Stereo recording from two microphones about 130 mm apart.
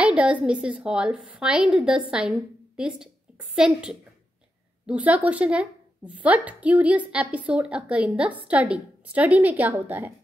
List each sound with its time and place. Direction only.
0.0 s a woman's voice: 10° right (ahead or behind)